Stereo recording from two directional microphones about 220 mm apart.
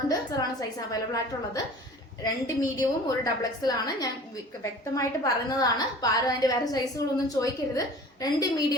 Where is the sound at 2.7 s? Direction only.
15° left (ahead or behind).